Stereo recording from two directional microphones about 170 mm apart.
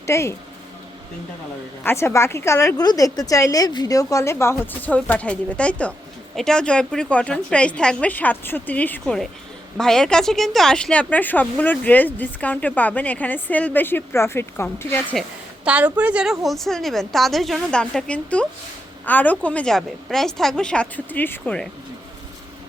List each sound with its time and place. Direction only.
0.0 s speech: 15° left (ahead or behind)
1.8 s speech: 15° left (ahead or behind)
15.6 s a woman's voice: 5° right (ahead or behind)